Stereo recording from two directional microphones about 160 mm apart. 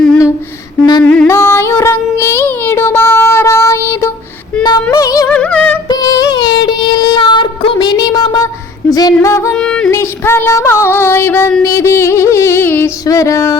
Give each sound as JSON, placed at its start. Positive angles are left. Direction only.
{"t": 1.0, "sound": "a sound", "side_deg": 5}
{"t": 1.3, "sound": "child singing", "side_deg": 15}
{"t": 4.6, "sound": "female singing", "side_deg": 25}
{"t": 5.3, "sound": "music", "side_deg": 5}
{"t": 5.9, "sound": "child singing", "side_deg": 25}
{"t": 8.9, "sound": "female singing", "side_deg": 25}
{"t": 9.6, "sound": "music", "side_deg": 5}
{"t": 9.9, "sound": "a sound", "side_deg": 15}
{"t": 11.6, "sound": "music", "side_deg": 15}